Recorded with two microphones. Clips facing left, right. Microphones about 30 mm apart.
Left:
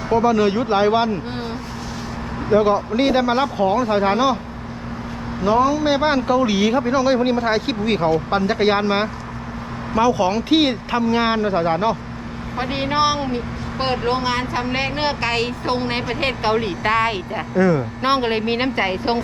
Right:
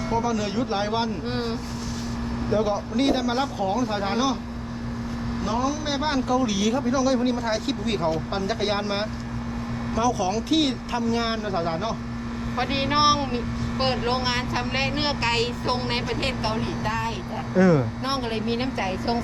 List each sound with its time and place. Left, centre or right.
0.1 s speech: left
2.5 s speech: left
5.5 s speech: centre
12.6 s speech: centre
14.6 s a woman's voice: centre
16.4 s speech: left
17.5 s speech: centre
18.0 s a woman's voice: left